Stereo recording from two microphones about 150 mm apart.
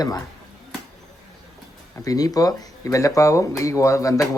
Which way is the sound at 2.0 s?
25° left (ahead or behind).